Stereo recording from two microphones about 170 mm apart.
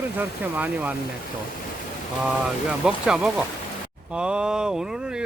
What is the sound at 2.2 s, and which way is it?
Speech, 5° right (ahead or behind).